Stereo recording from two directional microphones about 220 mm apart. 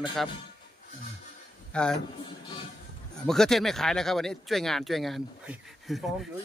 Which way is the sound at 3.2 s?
Centre (ahead or behind).